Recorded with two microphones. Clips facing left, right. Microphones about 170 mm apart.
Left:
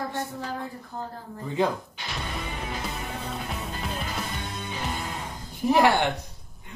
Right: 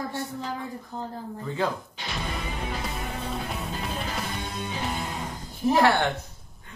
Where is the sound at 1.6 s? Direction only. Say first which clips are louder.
Left 3 dB; 15° left (ahead or behind).